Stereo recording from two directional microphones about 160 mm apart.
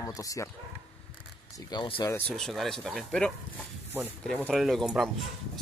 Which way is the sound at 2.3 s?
Centre (ahead or behind).